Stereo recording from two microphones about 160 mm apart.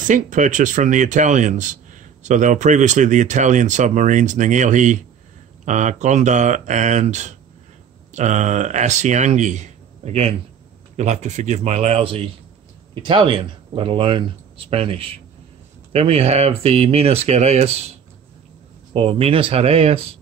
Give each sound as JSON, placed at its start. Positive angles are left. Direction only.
{"t": 0.0, "sound": "speech", "side_deg": -50}
{"t": 18.9, "sound": "speech", "side_deg": -35}